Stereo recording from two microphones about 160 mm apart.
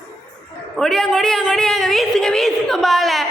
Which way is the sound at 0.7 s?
Centre (ahead or behind).